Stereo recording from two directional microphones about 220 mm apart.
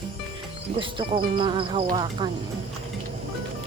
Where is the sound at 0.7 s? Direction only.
25° right (ahead or behind).